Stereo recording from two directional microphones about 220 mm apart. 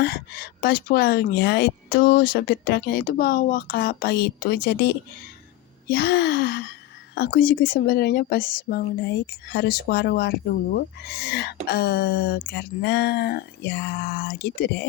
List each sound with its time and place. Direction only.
0.0 s speech: 50° left (ahead or behind)